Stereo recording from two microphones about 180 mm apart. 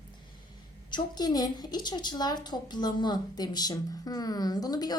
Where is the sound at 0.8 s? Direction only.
25° left (ahead or behind).